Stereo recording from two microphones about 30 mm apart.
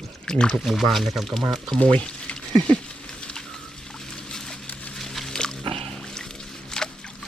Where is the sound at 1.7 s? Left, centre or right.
Left.